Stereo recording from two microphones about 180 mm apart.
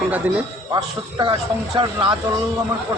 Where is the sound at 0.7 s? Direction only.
25° right (ahead or behind).